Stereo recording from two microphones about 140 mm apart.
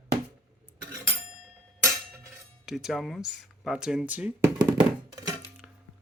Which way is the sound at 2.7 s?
5° right (ahead or behind).